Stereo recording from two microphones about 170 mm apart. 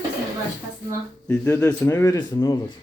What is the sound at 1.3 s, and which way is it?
Speech, 10° left (ahead or behind).